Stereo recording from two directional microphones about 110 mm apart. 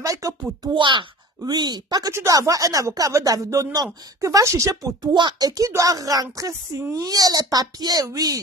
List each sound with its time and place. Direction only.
0.0 s speech: 30° right (ahead or behind)
0.7 s speech: 50° right (ahead or behind); by 5.1 s 30° right (ahead or behind)
5.1 s speech: 40° right (ahead or behind)